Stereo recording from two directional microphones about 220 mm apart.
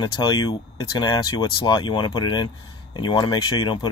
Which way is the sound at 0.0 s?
20° left (ahead or behind).